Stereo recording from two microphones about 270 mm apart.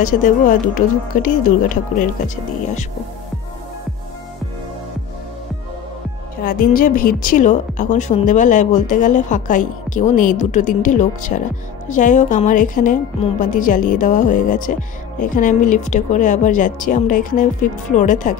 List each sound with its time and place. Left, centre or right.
0.0 s a woman's voice: left
6.4 s a woman's voice: left